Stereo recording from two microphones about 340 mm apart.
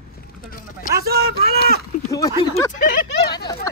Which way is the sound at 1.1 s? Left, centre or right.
Right.